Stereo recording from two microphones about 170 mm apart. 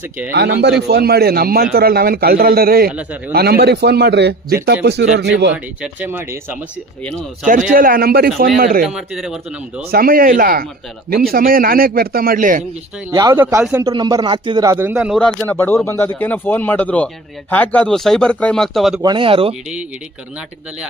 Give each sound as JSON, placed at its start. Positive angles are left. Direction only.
{"t": 0.3, "sound": "a man's voice", "side_deg": -75}
{"t": 2.9, "sound": "speech", "side_deg": -10}
{"t": 3.3, "sound": "a man's voice", "side_deg": -70}
{"t": 5.8, "sound": "speech", "side_deg": -10}
{"t": 7.7, "sound": "a man's voice", "side_deg": -55}
{"t": 8.8, "sound": "speech", "side_deg": -5}
{"t": 9.9, "sound": "a man's voice", "side_deg": -60}
{"t": 13.1, "sound": "speech", "side_deg": -20}
{"t": 13.8, "sound": "speech", "side_deg": -20}
{"t": 15.2, "sound": "speech", "side_deg": 5}
{"t": 19.0, "sound": "speech", "side_deg": -30}